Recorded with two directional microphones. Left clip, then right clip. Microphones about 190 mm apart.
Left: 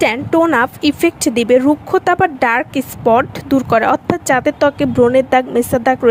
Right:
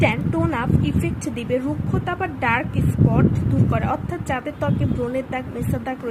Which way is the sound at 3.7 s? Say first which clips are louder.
Left 14 dB; 55° left (ahead or behind).